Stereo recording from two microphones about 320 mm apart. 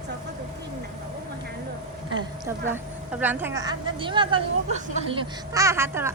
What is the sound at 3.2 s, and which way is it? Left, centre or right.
A woman's voice, centre.